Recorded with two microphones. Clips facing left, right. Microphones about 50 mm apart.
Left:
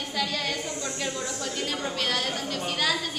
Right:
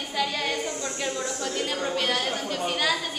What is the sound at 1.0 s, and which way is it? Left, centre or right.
Chatter, centre.